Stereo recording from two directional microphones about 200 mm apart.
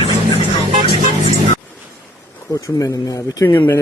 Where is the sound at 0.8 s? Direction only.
40° right (ahead or behind).